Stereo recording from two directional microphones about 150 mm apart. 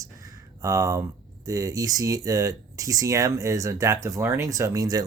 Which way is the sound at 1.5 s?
25° right (ahead or behind).